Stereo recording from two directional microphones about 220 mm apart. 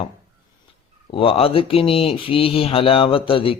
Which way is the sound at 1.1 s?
25° left (ahead or behind).